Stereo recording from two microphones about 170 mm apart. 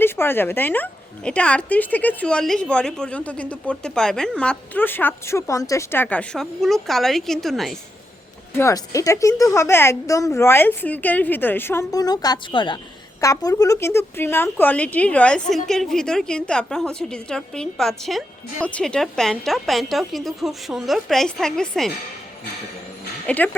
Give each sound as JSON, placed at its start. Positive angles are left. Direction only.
{"t": 0.0, "sound": "speech", "side_deg": 15}
{"t": 8.5, "sound": "speech", "side_deg": 20}
{"t": 23.2, "sound": "speech", "side_deg": 10}